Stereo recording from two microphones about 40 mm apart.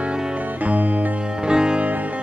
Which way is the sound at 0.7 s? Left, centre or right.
Right.